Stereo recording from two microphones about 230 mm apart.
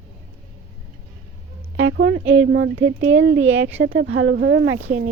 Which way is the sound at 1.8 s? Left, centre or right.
Right.